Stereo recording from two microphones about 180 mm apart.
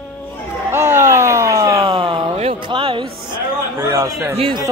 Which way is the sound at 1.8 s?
30° right (ahead or behind).